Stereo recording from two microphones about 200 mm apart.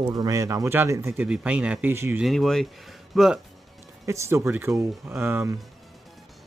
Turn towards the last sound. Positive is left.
turn(degrees=-10)  # may be behind; listen again after turning